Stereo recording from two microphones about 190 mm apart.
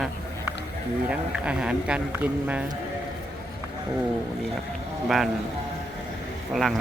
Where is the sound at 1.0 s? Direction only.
5° right (ahead or behind).